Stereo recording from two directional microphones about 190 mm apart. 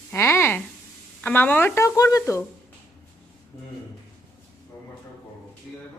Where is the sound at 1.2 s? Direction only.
10° left (ahead or behind).